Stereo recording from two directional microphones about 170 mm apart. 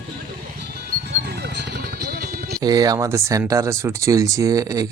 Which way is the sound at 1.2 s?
75° right (ahead or behind).